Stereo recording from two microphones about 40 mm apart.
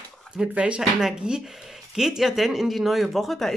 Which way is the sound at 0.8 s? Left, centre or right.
Centre.